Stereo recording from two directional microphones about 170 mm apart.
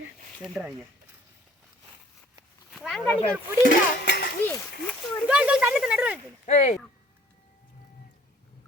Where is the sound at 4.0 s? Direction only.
75° left (ahead or behind).